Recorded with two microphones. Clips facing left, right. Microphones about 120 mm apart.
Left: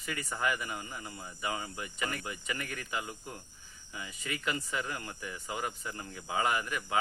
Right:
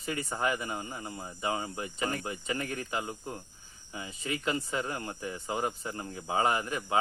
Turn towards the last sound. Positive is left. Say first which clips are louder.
# right 3 dB
turn(degrees=-30)  # may be behind; listen again after turning